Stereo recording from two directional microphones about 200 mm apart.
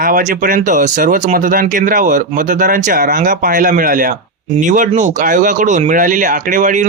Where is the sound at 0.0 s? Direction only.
40° right (ahead or behind).